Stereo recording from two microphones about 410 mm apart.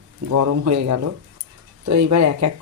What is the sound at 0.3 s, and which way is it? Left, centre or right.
Speech, right.